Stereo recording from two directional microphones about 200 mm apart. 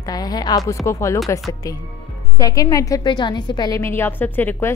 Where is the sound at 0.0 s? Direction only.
20° left (ahead or behind).